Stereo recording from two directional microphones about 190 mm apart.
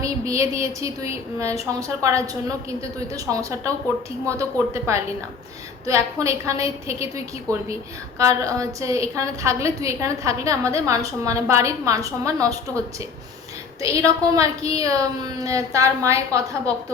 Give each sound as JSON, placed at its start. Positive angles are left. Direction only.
{"t": 0.0, "sound": "a woman's voice", "side_deg": -15}
{"t": 13.8, "sound": "a woman's voice", "side_deg": -15}